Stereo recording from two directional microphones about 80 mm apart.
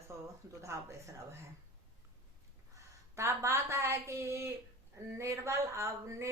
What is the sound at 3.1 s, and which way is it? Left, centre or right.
A woman's voice, right.